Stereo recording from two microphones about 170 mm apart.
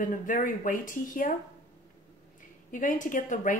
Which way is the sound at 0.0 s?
50° left (ahead or behind).